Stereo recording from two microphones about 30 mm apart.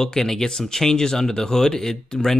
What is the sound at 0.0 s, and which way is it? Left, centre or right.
Speech, centre.